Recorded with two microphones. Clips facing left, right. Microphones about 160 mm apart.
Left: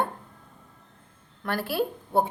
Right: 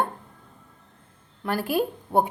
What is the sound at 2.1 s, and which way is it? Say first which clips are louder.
Speech: right 2 dB; 35° right (ahead or behind).